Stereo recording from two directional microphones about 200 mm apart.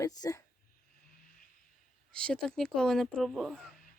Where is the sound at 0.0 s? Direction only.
15° left (ahead or behind).